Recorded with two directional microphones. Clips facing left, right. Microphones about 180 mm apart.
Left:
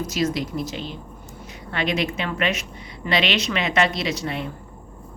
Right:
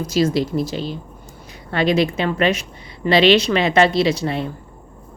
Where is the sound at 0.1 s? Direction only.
30° right (ahead or behind).